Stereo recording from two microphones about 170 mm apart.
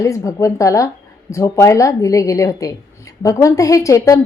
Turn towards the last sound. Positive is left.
turn(degrees=20)  # may be behind; listen again after turning